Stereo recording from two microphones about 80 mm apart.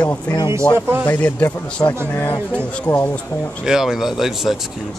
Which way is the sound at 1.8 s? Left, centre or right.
Left.